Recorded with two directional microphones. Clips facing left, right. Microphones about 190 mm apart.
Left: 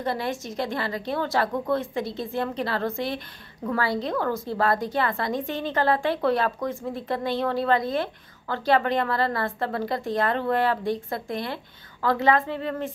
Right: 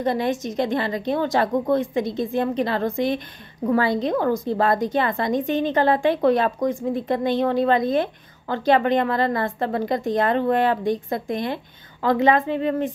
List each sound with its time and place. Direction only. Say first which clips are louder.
0.0 s a woman's voice: right 6 dB; 20° right (ahead or behind)